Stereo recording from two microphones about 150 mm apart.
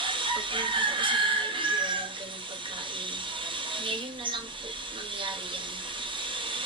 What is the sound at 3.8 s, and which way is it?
Speech, 35° right (ahead or behind).